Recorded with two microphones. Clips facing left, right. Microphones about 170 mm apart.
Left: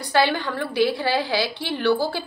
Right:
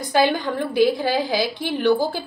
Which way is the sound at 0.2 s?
15° right (ahead or behind).